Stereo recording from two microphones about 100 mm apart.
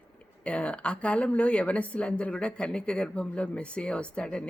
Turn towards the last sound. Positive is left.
turn(degrees=10)  # may be behind; listen again after turning